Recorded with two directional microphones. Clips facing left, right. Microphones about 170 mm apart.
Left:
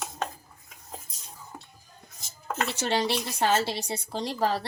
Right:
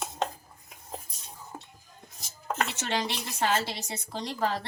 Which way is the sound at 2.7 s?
30° left (ahead or behind).